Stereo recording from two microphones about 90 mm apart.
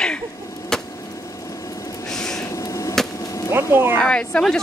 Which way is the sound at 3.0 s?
5° left (ahead or behind).